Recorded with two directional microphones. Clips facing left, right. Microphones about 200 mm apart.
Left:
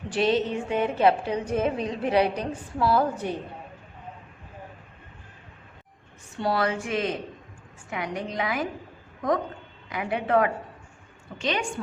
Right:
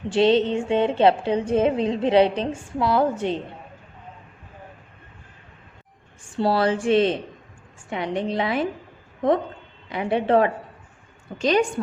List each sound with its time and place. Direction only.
0.1 s a woman's voice: 25° right (ahead or behind)
6.3 s a woman's voice: 30° right (ahead or behind)
9.9 s a woman's voice: 30° right (ahead or behind)
11.3 s a woman's voice: 40° right (ahead or behind)